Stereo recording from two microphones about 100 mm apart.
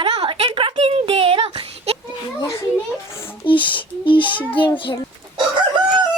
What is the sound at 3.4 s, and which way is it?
Speech, 55° left (ahead or behind).